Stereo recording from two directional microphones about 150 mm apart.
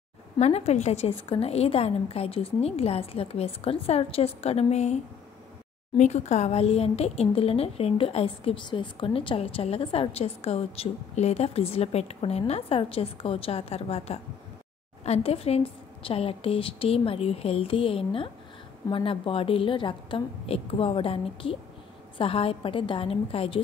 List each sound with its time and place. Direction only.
0.4 s a woman's voice: 45° left (ahead or behind)